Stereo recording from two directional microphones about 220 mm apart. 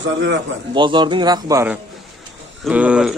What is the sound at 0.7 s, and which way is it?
A man's voice, 20° right (ahead or behind).